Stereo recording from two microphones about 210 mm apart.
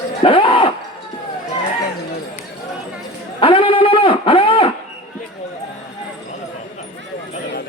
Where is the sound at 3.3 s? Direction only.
25° left (ahead or behind).